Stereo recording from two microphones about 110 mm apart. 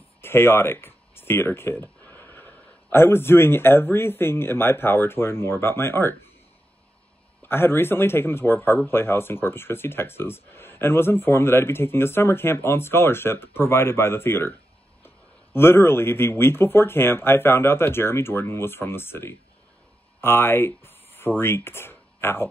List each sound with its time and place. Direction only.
0.2 s a sound: 20° left (ahead or behind)
2.9 s speech: 20° left (ahead or behind)
7.4 s speech: 20° left (ahead or behind)